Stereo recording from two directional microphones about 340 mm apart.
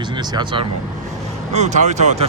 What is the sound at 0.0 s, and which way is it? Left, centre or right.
Speech, centre.